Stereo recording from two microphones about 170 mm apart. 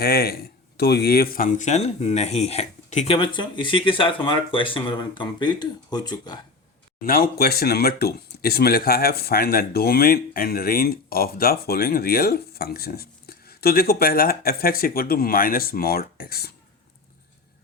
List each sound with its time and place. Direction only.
0.0 s speech: 65° left (ahead or behind); by 6.4 s 25° left (ahead or behind)
7.0 s speech: 60° left (ahead or behind)